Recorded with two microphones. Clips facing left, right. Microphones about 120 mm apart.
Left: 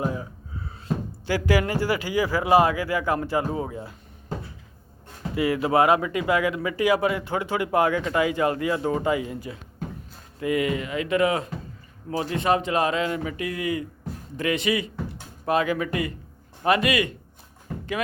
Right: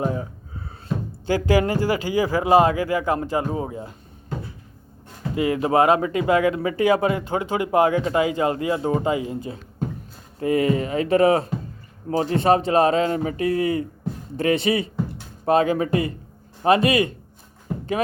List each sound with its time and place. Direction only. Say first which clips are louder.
0.0 s gasp: right 3 dB; 30° right (ahead or behind)
1.3 s speech: right 3 dB; 25° right (ahead or behind)
5.3 s speech: right 2 dB; 25° right (ahead or behind)